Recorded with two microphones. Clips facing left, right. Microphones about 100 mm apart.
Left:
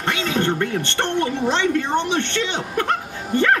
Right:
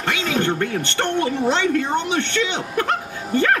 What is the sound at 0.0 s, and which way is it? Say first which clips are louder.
Music: even; 40° left (ahead or behind).